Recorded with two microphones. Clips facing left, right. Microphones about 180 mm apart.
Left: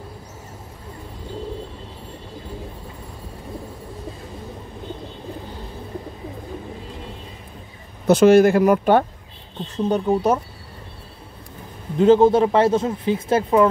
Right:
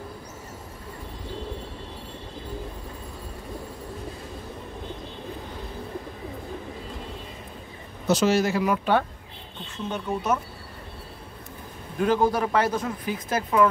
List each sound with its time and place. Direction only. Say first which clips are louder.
8.1 s speech: left 9 dB; 55° left (ahead or behind)
9.8 s speech: left 8 dB; 35° left (ahead or behind)
12.0 s speech: left 9 dB; 25° left (ahead or behind)